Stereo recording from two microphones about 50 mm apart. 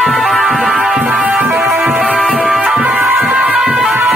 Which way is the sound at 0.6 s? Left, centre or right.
Centre.